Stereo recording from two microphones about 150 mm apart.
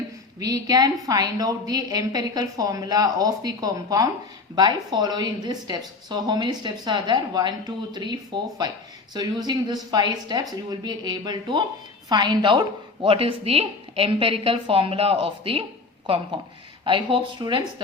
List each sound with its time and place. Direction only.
0.3 s a woman's voice: 25° right (ahead or behind)
9.1 s a woman's voice: 30° right (ahead or behind)
16.8 s a woman's voice: 35° right (ahead or behind)